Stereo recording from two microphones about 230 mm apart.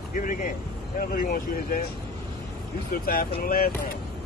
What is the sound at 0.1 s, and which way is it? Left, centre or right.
Vehicle, left.